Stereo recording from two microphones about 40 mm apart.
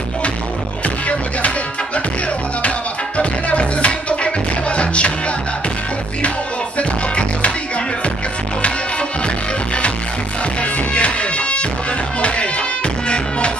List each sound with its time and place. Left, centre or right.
0.8 s music: left
3.2 s music: left
6.8 s music: left
10.6 s music: left